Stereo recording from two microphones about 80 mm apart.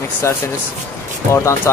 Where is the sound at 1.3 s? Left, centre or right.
Left.